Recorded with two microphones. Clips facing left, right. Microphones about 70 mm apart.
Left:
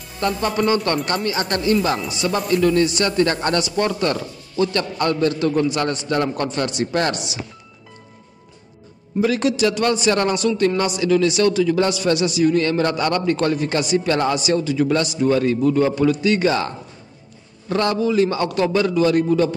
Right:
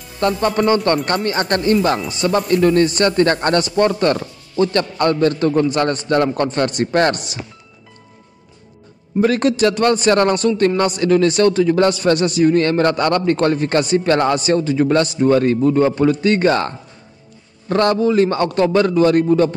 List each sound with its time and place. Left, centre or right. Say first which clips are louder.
0.2 s speech: right 4 dB; right
9.2 s speech: right 3 dB; right